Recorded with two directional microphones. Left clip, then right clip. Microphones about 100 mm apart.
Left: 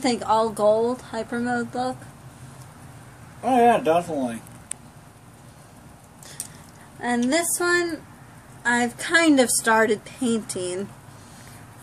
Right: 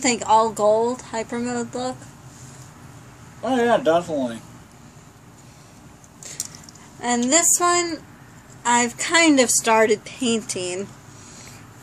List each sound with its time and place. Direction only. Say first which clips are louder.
0.0 s a woman's voice: right 4 dB; 10° left (ahead or behind)
3.4 s a woman's voice: left 1 dB; 20° left (ahead or behind)
7.2 s a woman's voice: right 5 dB; 10° left (ahead or behind)